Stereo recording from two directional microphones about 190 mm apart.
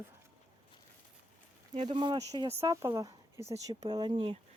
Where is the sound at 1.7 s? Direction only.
30° right (ahead or behind).